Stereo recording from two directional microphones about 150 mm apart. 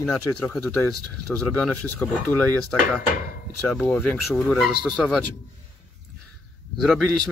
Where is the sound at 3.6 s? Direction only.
5° left (ahead or behind).